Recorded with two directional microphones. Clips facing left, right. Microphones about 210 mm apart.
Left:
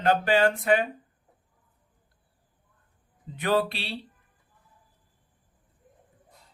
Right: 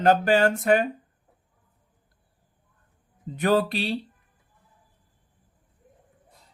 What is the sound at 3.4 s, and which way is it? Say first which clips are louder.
Speech: right 3 dB; 45° right (ahead or behind).